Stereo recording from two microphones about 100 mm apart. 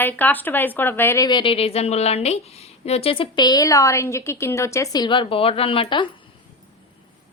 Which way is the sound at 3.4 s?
40° left (ahead or behind).